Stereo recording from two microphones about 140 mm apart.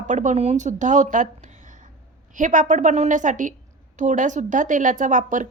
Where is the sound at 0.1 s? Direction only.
60° right (ahead or behind).